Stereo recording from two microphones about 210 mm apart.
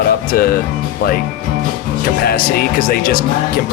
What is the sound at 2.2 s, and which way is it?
Speech, 45° left (ahead or behind).